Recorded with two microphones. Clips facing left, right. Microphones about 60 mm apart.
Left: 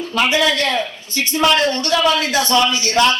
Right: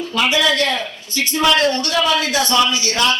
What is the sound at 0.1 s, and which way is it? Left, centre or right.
Speech, left.